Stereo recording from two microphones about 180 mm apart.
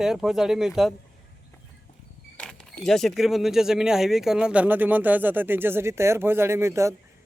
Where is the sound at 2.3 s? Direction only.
5° left (ahead or behind).